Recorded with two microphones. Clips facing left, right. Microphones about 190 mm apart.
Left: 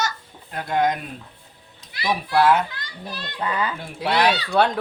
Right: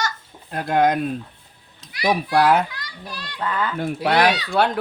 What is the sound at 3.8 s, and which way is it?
Speech, 55° right (ahead or behind).